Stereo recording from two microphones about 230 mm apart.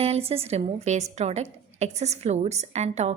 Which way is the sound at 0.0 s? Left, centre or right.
Right.